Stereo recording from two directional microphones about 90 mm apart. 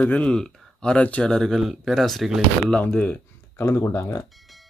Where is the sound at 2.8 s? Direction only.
15° left (ahead or behind).